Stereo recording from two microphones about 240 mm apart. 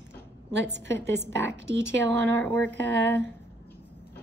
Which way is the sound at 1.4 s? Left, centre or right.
Right.